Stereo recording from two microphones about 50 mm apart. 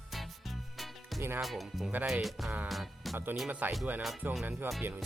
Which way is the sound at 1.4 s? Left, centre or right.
Centre.